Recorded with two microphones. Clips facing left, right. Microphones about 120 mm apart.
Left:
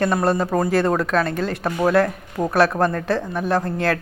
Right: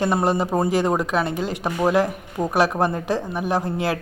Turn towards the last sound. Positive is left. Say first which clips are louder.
# left 2 dB
turn(degrees=-15)  # may be behind; listen again after turning